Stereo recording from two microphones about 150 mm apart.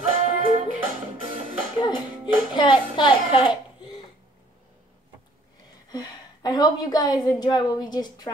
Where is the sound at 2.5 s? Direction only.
30° left (ahead or behind).